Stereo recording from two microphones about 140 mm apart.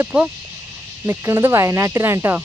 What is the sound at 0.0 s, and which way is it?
Speech, 10° right (ahead or behind).